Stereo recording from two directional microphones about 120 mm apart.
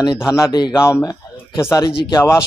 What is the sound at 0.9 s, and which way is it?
Speech, 25° left (ahead or behind).